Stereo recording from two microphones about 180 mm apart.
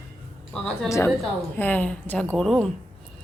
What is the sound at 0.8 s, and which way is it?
A woman's voice, 15° left (ahead or behind).